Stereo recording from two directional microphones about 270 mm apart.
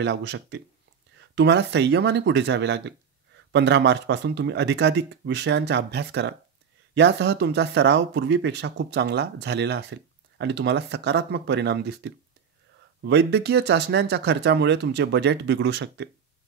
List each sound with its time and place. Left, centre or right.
0.0 s speech: right